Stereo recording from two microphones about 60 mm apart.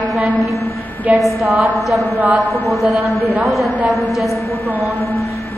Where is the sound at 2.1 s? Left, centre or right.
Right.